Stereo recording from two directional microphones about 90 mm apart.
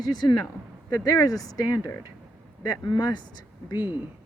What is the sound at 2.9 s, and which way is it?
Speech, 55° left (ahead or behind).